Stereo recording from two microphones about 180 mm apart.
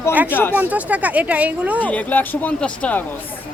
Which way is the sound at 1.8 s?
10° left (ahead or behind).